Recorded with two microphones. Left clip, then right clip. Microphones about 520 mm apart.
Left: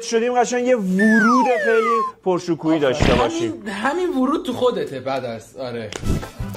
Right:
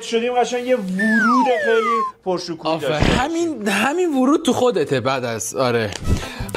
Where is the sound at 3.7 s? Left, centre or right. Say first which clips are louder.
Right 4 dB; right.